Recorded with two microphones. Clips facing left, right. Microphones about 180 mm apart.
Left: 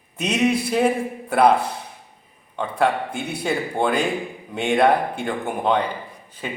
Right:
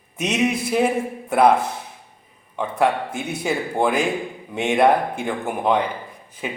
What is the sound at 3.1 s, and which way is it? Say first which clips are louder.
A man's voice: even; 5° right (ahead or behind).